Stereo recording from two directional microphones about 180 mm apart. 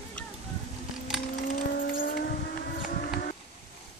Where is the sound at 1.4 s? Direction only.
45° left (ahead or behind).